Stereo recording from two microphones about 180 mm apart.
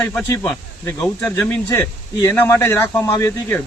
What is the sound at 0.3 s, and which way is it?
A man's voice, 15° left (ahead or behind).